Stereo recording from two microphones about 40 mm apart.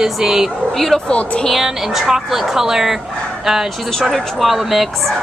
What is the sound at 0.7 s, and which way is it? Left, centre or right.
Speech, centre.